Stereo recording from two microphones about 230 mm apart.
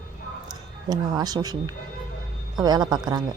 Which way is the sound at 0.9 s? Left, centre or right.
Centre.